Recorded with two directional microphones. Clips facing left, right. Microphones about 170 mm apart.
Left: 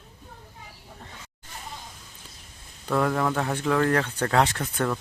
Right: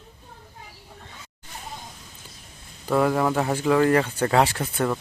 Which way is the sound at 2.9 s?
5° right (ahead or behind).